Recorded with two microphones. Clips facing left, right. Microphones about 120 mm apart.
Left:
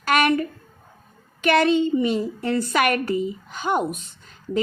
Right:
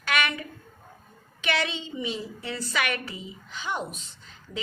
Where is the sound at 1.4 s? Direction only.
50° left (ahead or behind).